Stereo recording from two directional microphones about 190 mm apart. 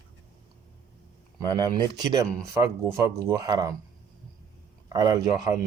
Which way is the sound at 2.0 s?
20° right (ahead or behind).